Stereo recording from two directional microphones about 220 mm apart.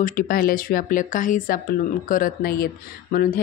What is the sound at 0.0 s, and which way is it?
Speech, 40° left (ahead or behind).